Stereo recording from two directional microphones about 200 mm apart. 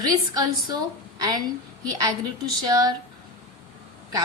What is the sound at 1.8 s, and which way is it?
A woman's voice, 20° right (ahead or behind).